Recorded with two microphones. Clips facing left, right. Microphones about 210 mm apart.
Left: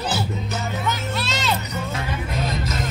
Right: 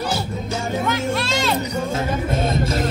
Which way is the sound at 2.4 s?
30° right (ahead or behind).